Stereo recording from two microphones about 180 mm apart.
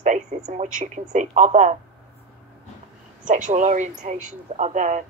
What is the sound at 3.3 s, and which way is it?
Speech, 45° right (ahead or behind).